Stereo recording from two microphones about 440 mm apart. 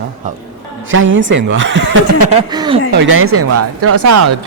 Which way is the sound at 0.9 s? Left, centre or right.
Right.